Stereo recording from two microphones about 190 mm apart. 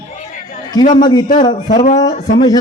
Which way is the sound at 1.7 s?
40° left (ahead or behind).